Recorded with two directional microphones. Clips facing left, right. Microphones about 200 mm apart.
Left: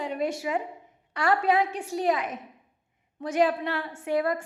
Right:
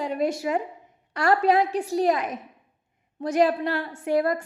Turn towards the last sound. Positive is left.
turn(degrees=-40)  # may be behind; listen again after turning